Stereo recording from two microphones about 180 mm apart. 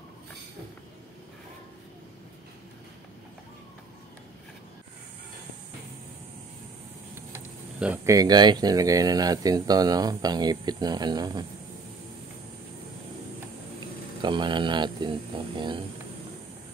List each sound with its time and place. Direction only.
7.3 s speech: 10° right (ahead or behind)
14.2 s speech: 25° right (ahead or behind)